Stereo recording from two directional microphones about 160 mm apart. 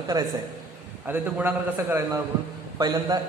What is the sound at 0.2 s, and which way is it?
Speech, 25° right (ahead or behind).